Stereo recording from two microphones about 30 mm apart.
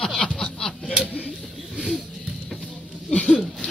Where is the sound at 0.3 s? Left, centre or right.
Centre.